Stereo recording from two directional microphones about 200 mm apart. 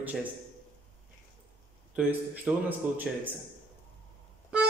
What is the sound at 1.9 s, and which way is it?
A man's voice, 5° right (ahead or behind).